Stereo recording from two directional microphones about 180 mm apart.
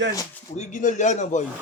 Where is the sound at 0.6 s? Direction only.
40° left (ahead or behind).